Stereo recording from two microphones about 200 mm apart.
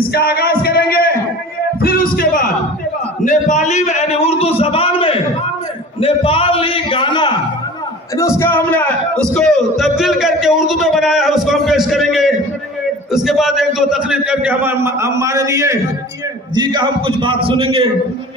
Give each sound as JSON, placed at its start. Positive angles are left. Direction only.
{"t": 0.1, "sound": "music", "side_deg": 50}
{"t": 3.3, "sound": "a sound", "side_deg": 35}
{"t": 8.2, "sound": "a man's voice", "side_deg": 15}